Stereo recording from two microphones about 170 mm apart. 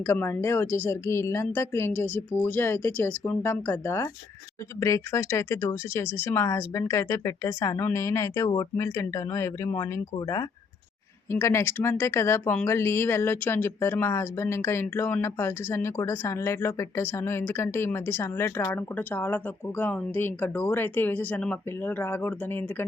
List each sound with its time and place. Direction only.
0.0 s speech: 15° left (ahead or behind)